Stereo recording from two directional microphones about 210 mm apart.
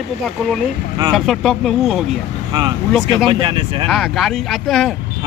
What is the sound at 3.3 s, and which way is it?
Speech, 25° right (ahead or behind).